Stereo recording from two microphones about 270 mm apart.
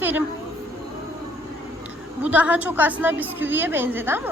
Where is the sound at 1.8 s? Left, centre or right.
Centre.